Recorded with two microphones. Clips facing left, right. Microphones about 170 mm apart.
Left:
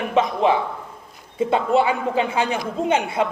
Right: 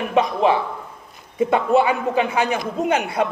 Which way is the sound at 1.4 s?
25° left (ahead or behind).